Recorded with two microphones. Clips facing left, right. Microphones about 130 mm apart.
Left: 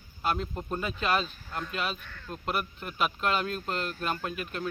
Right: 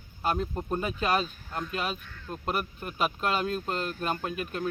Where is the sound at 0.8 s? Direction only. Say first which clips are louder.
Right 1 dB; 40° right (ahead or behind).